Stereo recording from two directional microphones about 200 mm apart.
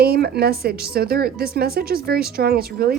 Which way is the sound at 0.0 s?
50° right (ahead or behind).